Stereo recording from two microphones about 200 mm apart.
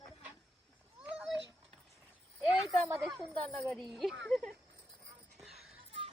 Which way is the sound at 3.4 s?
5° left (ahead or behind).